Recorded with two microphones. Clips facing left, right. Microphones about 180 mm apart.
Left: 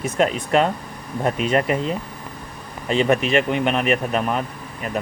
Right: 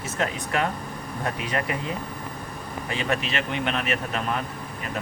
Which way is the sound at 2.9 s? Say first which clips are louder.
Left 10 dB; 20° left (ahead or behind).